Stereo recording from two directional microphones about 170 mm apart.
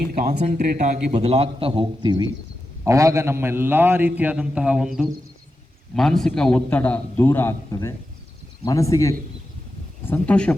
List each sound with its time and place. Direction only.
0.0 s speech: 65° right (ahead or behind)
0.6 s a man's voice: 40° right (ahead or behind); by 9.1 s 20° left (ahead or behind)
10.1 s a man's voice: 5° left (ahead or behind)